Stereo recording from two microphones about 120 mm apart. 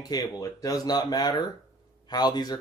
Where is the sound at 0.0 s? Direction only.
30° left (ahead or behind).